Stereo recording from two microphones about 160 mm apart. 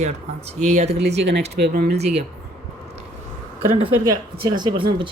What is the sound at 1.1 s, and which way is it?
Speech, 90° right.